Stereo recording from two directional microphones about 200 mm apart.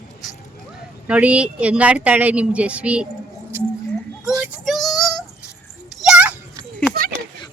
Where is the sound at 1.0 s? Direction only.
5° right (ahead or behind).